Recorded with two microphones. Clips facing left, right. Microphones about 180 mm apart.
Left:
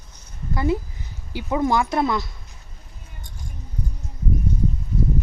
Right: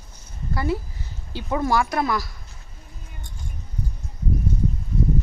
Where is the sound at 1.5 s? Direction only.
20° left (ahead or behind).